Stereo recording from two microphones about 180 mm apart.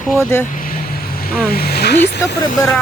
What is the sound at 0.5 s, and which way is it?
Vehicle, 50° left (ahead or behind).